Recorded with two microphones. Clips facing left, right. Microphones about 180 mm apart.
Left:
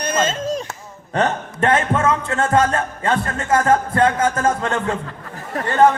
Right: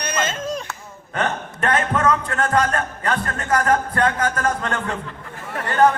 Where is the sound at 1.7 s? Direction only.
25° left (ahead or behind).